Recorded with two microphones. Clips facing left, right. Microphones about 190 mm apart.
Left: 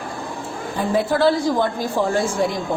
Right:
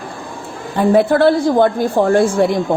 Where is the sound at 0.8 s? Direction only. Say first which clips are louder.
Right 7 dB; 60° right (ahead or behind).